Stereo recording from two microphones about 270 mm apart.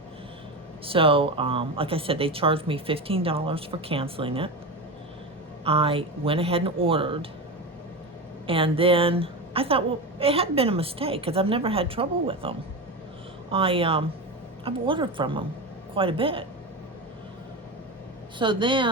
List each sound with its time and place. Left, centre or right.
0.9 s a woman's voice: centre
5.6 s a woman's voice: right
8.4 s a woman's voice: centre
18.3 s speech: centre